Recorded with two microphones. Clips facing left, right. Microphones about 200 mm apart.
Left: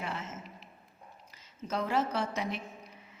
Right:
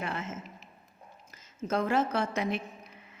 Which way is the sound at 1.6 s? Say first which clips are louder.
Right 3 dB; 50° right (ahead or behind).